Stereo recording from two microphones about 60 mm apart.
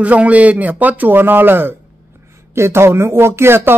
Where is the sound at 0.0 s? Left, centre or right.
Right.